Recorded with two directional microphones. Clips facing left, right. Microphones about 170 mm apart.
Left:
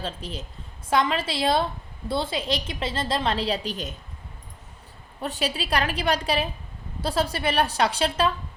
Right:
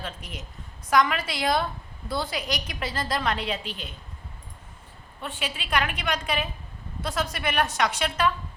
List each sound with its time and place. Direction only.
0.0 s a woman's voice: 30° left (ahead or behind)
5.2 s a woman's voice: 40° left (ahead or behind)